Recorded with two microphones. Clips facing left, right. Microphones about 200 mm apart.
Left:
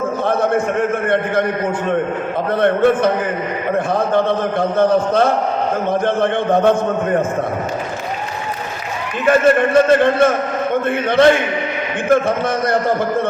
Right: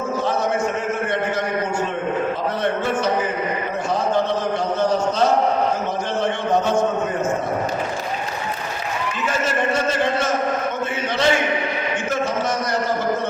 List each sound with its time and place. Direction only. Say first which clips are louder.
0.3 s a man's voice: left 5 dB; 55° left (ahead or behind)
2.6 s a man's voice: left 12 dB; 55° left (ahead or behind)
4.8 s a man's voice: left 6 dB; 55° left (ahead or behind)
9.2 s a man's voice: left 11 dB; 55° left (ahead or behind)